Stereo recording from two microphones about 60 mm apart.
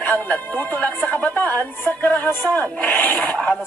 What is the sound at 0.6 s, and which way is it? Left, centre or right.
Music, left.